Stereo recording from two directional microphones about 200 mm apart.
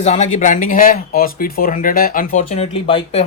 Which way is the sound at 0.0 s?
35° left (ahead or behind).